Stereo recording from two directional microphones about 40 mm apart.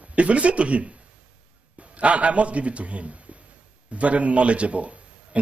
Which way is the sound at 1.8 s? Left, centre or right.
Right.